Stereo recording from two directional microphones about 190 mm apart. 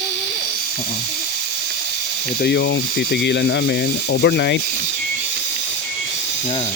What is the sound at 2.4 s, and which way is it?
Speech, 65° left (ahead or behind).